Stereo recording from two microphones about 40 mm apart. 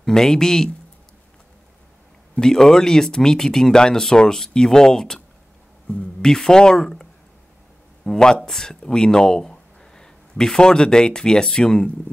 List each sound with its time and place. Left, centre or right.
0.0 s speech: centre
2.4 s speech: centre